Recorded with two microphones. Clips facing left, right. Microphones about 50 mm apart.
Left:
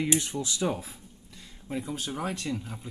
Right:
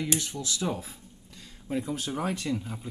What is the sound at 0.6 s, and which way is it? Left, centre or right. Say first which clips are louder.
Speech: left 1 dB; centre.